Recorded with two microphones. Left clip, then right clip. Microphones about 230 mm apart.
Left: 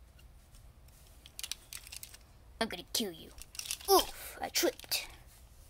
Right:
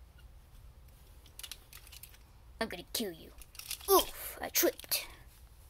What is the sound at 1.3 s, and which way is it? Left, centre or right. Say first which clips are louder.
Typing: left 5 dB; left.